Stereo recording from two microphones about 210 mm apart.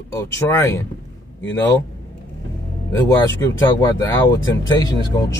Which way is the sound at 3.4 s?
20° left (ahead or behind).